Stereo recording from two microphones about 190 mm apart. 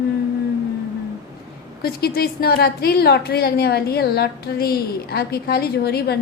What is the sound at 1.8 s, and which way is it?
A woman's voice, 55° left (ahead or behind).